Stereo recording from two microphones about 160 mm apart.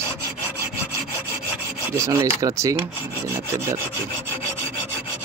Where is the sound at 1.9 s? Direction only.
20° right (ahead or behind).